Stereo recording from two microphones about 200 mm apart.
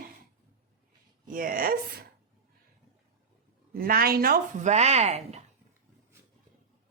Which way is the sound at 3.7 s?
45° right (ahead or behind).